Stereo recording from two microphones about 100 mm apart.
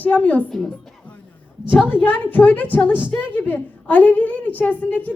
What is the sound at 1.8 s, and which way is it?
A woman's voice, 15° left (ahead or behind).